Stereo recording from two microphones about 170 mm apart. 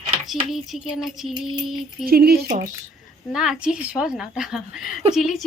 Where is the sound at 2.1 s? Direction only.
65° right (ahead or behind).